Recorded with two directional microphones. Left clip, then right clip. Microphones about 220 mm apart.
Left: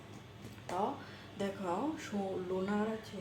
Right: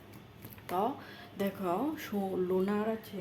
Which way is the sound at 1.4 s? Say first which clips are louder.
Right 3 dB; 50° right (ahead or behind).